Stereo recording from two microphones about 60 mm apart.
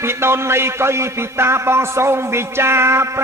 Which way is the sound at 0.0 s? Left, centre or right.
Right.